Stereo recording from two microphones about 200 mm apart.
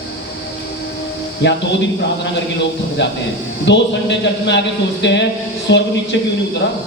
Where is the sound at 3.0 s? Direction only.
60° left (ahead or behind).